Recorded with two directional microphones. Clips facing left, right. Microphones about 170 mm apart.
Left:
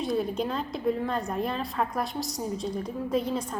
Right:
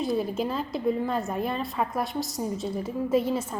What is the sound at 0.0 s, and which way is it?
A woman's voice, centre (ahead or behind).